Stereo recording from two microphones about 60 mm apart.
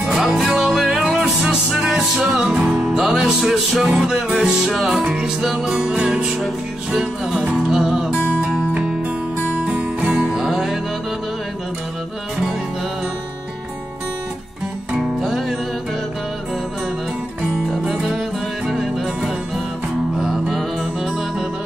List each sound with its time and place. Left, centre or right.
0.1 s music: centre
2.5 s music: right; by 5.7 s centre
5.7 s music: centre
9.7 s music: centre
10.3 s music: centre
15.0 s music: centre
17.8 s music: centre